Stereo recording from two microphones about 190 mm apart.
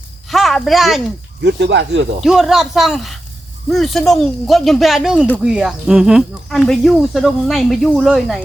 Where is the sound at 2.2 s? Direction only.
Centre (ahead or behind).